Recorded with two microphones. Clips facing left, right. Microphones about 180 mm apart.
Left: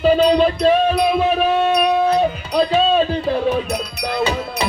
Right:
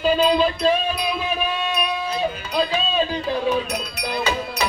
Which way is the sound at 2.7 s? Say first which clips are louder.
Left 7 dB; 60° left (ahead or behind).